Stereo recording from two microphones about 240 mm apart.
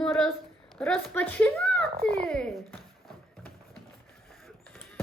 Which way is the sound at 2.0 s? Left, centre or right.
Right.